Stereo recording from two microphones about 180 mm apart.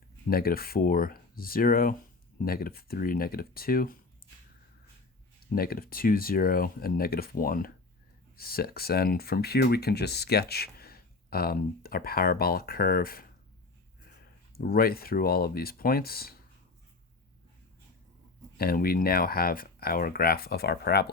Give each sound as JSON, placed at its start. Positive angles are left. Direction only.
{"t": 0.3, "sound": "speech", "side_deg": 55}
{"t": 5.5, "sound": "speech", "side_deg": 55}
{"t": 14.5, "sound": "speech", "side_deg": 55}
{"t": 18.5, "sound": "speech", "side_deg": 55}